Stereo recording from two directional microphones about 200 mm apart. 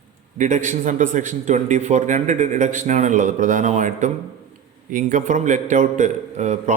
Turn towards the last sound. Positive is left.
turn(degrees=-35)  # may be behind; listen again after turning